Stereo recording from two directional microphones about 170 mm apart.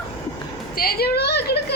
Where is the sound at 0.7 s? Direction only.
65° left (ahead or behind).